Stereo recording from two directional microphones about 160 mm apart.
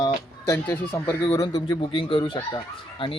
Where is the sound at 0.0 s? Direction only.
15° left (ahead or behind).